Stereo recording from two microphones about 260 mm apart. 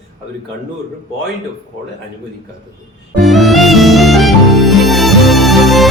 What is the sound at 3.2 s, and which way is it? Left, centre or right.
Music, centre.